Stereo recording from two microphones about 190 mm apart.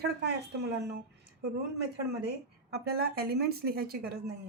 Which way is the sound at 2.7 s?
55° right (ahead or behind).